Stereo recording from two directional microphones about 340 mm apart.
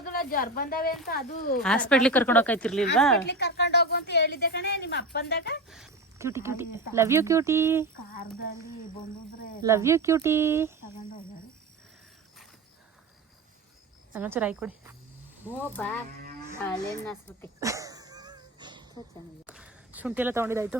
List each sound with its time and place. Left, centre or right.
0.0 s a woman's voice: left
1.6 s speech: centre
3.2 s a woman's voice: left
5.6 s speech: centre
9.6 s speech: centre
14.1 s speech: centre
15.7 s speech: centre
17.1 s speech: centre
17.6 s sneeze: centre
19.5 s a sound: centre